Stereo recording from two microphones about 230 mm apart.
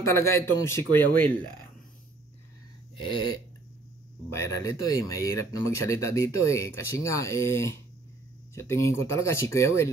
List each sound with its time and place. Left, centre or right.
0.0 s speech: centre
3.0 s a sound: centre
4.3 s speech: centre